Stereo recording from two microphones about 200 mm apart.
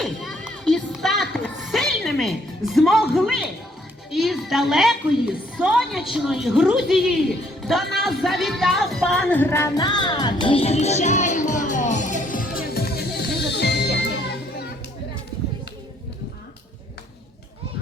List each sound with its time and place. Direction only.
0.0 s music: centre (ahead or behind)
4.1 s a woman's voice: centre (ahead or behind)
7.9 s music: centre (ahead or behind); by 14.7 s 55° left (ahead or behind)